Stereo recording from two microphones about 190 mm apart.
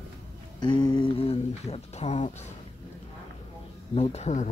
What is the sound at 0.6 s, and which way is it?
Speech, 25° left (ahead or behind).